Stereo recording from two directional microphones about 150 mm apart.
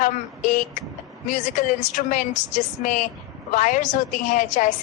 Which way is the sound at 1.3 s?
60° left (ahead or behind).